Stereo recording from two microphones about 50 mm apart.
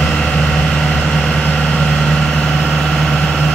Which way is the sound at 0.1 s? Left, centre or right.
Centre.